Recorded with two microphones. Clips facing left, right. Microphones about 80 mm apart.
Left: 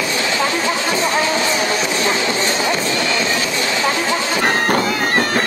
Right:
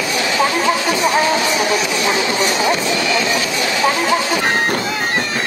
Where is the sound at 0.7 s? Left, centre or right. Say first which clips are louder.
Right 2 dB; left.